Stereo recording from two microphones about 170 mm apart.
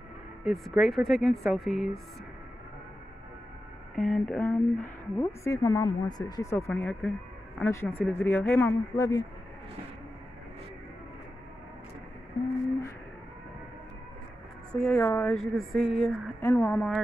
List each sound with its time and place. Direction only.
0.5 s speech: centre (ahead or behind)
3.9 s speech: 5° left (ahead or behind)
6.7 s speech: 5° left (ahead or behind)
14.7 s speech: 5° left (ahead or behind)
15.3 s speech: centre (ahead or behind)